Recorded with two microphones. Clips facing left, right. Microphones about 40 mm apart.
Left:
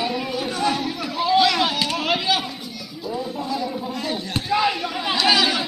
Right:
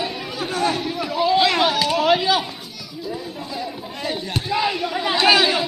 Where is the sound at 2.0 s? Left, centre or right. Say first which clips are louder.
Right 5 dB; centre.